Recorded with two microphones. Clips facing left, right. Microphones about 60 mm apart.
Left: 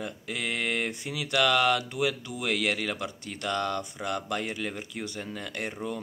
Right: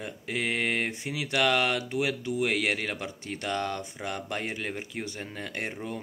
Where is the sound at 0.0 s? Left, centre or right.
Right.